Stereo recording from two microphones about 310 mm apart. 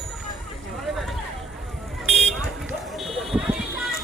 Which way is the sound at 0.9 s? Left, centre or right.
Centre.